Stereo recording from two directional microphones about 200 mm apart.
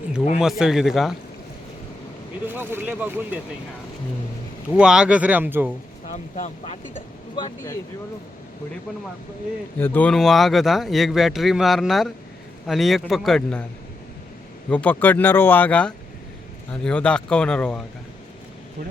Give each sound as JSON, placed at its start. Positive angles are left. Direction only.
{"t": 0.6, "sound": "a man's voice", "side_deg": 0}
{"t": 2.5, "sound": "speech", "side_deg": -10}
{"t": 4.7, "sound": "a man's voice", "side_deg": -5}
{"t": 6.1, "sound": "speech", "side_deg": 35}
{"t": 7.3, "sound": "speech", "side_deg": 20}
{"t": 9.7, "sound": "a man's voice", "side_deg": 10}
{"t": 14.7, "sound": "a man's voice", "side_deg": 10}